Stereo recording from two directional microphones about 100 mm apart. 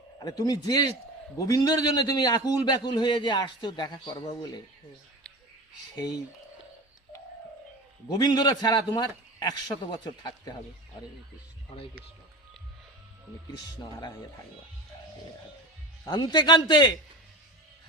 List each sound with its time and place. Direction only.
0.3 s a man's voice: 40° left (ahead or behind)
8.2 s a man's voice: 45° left (ahead or behind)
16.0 s a man's voice: 50° left (ahead or behind)